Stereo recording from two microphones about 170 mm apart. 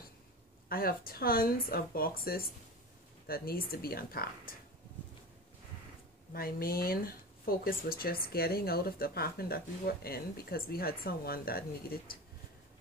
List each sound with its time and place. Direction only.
0.7 s speech: 60° left (ahead or behind)
6.3 s speech: 60° left (ahead or behind)